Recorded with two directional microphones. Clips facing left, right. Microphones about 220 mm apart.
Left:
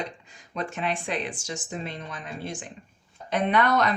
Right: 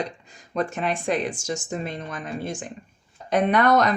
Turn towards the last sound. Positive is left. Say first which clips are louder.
# right 4 dB
turn(degrees=-45)  # may be behind; listen again after turning